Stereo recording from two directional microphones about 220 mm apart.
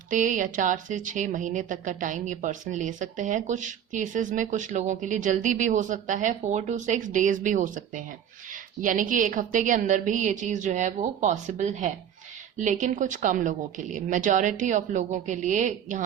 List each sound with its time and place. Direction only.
0.1 s a woman's voice: 35° right (ahead or behind)